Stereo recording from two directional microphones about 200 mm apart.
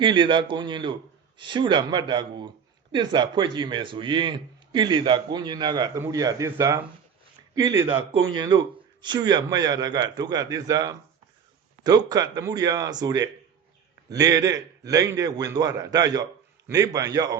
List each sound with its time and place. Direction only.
0.0 s a man's voice: 25° right (ahead or behind)